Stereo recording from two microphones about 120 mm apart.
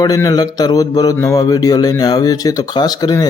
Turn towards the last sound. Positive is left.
turn(degrees=35)  # may be behind; listen again after turning